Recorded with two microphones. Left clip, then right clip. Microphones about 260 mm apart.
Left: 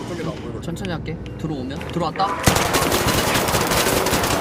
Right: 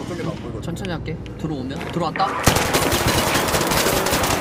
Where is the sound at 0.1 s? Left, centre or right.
Centre.